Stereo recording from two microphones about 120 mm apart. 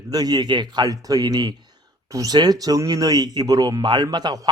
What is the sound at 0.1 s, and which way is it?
Speech, 35° right (ahead or behind).